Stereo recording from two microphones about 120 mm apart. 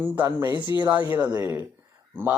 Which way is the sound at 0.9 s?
15° right (ahead or behind).